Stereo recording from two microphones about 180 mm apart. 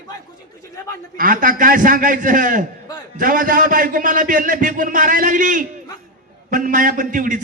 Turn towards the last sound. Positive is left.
turn(degrees=-45)  # may be behind; listen again after turning